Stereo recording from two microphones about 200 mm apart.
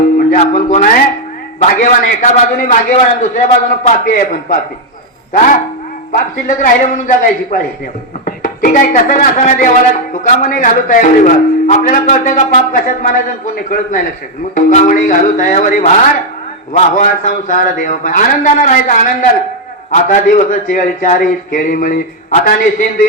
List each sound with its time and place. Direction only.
0.2 s music: 40° left (ahead or behind)
1.8 s a man's voice: 40° left (ahead or behind)